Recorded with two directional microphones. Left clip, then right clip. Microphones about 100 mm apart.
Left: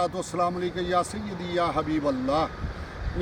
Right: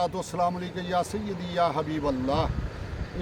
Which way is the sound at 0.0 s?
25° right (ahead or behind).